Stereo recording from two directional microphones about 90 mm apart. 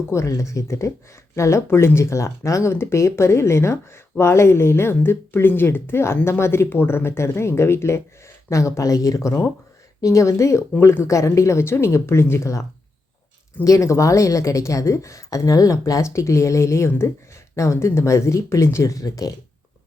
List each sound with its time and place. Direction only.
0.1 s a woman's voice: 30° left (ahead or behind)
13.7 s a woman's voice: 35° left (ahead or behind)